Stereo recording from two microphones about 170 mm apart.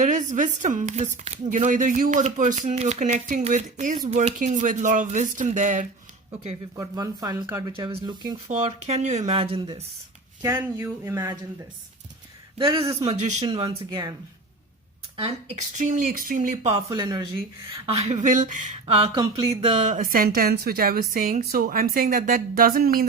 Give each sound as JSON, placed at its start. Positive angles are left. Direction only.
{"t": 0.0, "sound": "speech", "side_deg": -45}
{"t": 6.7, "sound": "speech", "side_deg": -20}
{"t": 8.4, "sound": "speech", "side_deg": -45}
{"t": 10.4, "sound": "speech", "side_deg": -15}
{"t": 12.5, "sound": "speech", "side_deg": -30}
{"t": 15.8, "sound": "speech", "side_deg": -50}
{"t": 16.7, "sound": "speech", "side_deg": -25}
{"t": 17.8, "sound": "speech", "side_deg": -35}